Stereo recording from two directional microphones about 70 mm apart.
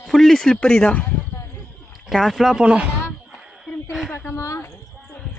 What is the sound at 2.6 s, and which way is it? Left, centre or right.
Speech, centre.